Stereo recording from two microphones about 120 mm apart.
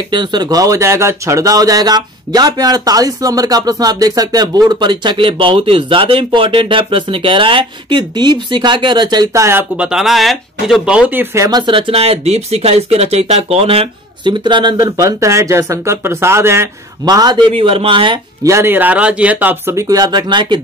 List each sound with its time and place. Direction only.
0.1 s speech: 40° right (ahead or behind); by 9.7 s 20° right (ahead or behind)
9.8 s speech: 5° right (ahead or behind)
11.3 s speech: 30° right (ahead or behind)
11.6 s speech: 50° right (ahead or behind); by 16.6 s 20° right (ahead or behind)
17.0 s a man's voice: 35° right (ahead or behind)
18.4 s speech: 20° right (ahead or behind)
19.7 s speech: 25° right (ahead or behind)